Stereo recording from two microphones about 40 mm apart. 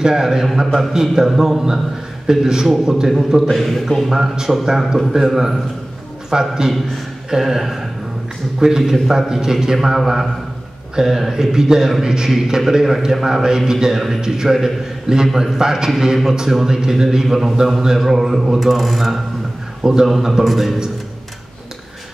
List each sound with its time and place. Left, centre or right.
0.0 s a man's voice: centre
3.4 s speech: centre
4.1 s a man's voice: centre
19.8 s a man's voice: centre